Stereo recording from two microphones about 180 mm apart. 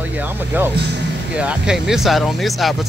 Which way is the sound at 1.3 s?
5° right (ahead or behind).